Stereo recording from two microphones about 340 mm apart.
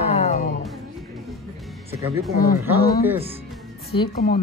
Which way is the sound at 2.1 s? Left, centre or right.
Centre.